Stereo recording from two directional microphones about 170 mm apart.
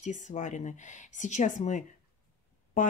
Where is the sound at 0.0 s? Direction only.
45° left (ahead or behind).